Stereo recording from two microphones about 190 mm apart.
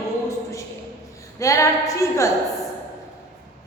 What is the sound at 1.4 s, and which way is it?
Speech, 15° left (ahead or behind).